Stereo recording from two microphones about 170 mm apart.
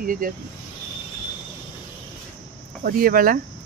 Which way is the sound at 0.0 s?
55° right (ahead or behind).